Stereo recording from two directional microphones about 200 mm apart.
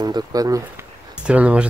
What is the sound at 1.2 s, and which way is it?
Speech, 5° right (ahead or behind).